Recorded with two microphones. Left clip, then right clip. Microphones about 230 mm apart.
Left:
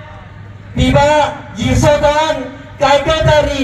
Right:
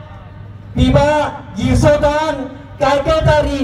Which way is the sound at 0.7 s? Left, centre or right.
Right.